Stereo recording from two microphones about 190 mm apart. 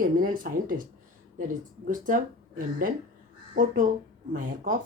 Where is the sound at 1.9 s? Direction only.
45° right (ahead or behind).